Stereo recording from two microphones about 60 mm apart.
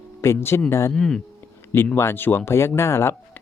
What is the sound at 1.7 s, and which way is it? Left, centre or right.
Speech, left.